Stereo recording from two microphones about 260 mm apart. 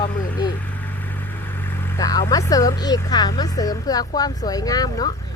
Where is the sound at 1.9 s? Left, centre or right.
Centre.